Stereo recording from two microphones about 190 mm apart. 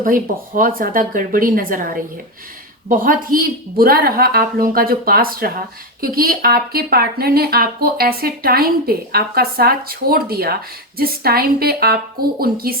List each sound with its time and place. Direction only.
0.0 s speech: 45° right (ahead or behind)